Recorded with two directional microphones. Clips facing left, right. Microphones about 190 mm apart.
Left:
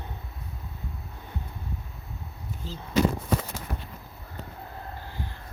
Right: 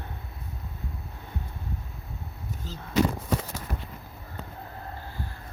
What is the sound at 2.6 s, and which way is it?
Speech, 45° right (ahead or behind).